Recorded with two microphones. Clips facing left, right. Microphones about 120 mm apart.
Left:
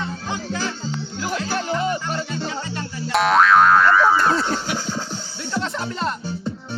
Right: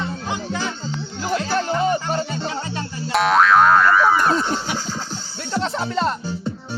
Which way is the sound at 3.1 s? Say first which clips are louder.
Even; centre (ahead or behind).